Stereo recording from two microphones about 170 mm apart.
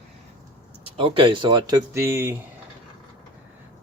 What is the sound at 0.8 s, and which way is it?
Speech, 30° right (ahead or behind).